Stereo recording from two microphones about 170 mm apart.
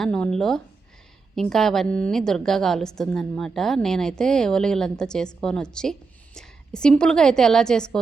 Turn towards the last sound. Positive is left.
turn(degrees=5)  # may be behind; listen again after turning